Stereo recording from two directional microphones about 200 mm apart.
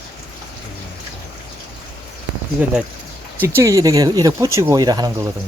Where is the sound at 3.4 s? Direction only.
15° right (ahead or behind).